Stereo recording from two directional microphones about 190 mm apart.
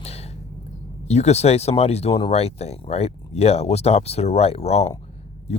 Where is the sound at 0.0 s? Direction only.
35° left (ahead or behind).